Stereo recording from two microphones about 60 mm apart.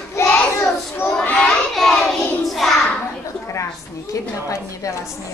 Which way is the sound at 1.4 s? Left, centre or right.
Centre.